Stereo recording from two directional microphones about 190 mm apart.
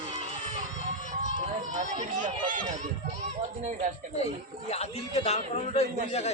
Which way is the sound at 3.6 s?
40° right (ahead or behind).